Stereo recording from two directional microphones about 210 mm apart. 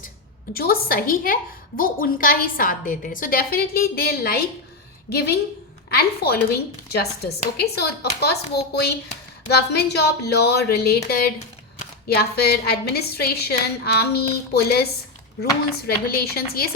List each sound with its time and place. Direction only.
0.5 s a woman's voice: 45° left (ahead or behind)
16.0 s a woman's voice: 45° left (ahead or behind)